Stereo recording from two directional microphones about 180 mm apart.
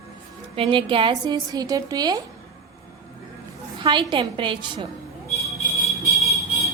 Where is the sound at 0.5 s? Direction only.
30° right (ahead or behind).